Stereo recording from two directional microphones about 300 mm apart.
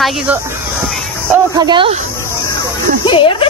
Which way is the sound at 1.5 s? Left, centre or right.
Centre.